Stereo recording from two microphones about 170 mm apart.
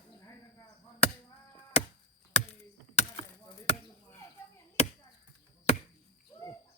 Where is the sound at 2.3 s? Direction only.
40° left (ahead or behind).